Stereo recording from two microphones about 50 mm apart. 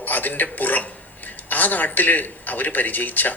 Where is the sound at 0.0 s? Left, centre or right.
Left.